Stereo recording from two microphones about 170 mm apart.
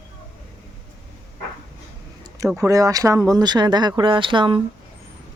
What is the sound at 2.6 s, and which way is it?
Speech, 20° right (ahead or behind).